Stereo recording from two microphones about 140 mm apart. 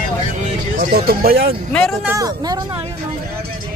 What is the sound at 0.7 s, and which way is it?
Speech, 80° right.